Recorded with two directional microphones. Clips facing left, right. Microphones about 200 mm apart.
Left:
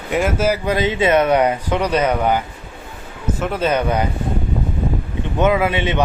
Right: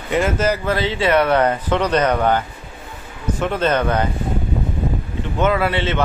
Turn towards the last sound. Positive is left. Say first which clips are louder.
# left 1 dB
turn(degrees=15)  # may be behind; listen again after turning